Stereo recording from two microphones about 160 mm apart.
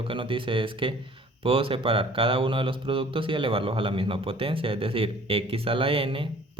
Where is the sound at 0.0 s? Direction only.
35° right (ahead or behind).